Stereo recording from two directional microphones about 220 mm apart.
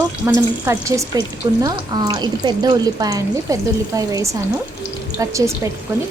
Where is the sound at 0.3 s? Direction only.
10° right (ahead or behind).